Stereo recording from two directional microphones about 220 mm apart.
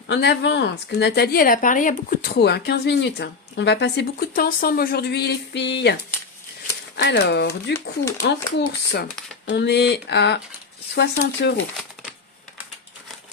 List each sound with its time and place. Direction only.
0.1 s a woman's voice: 50° left (ahead or behind)